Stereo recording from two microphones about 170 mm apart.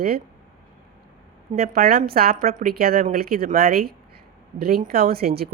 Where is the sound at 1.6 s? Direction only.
65° right (ahead or behind).